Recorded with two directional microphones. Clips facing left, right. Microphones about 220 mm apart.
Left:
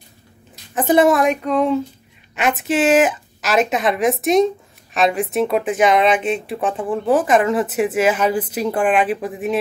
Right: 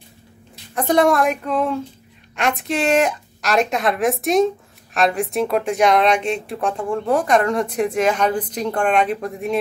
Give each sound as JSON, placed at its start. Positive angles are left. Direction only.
{"t": 0.7, "sound": "speech", "side_deg": 5}